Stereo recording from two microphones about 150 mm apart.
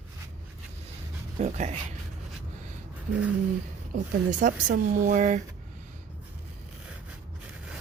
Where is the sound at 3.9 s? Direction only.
60° right (ahead or behind).